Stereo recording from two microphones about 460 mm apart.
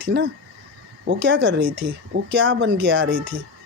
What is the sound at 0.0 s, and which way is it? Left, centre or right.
Speech, right.